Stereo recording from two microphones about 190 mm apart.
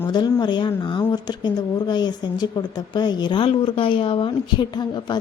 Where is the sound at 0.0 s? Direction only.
20° left (ahead or behind).